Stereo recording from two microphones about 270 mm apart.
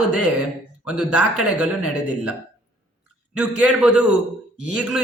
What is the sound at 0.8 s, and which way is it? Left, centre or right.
Speech, centre.